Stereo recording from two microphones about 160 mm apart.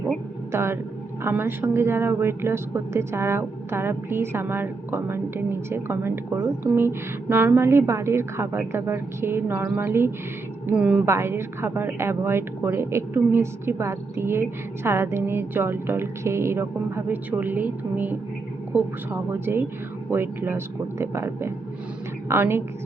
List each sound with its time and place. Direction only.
0.5 s speech: 15° right (ahead or behind)